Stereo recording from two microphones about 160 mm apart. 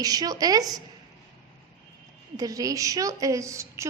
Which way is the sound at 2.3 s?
20° right (ahead or behind).